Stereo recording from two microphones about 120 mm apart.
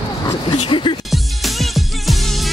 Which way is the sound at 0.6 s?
45° left (ahead or behind).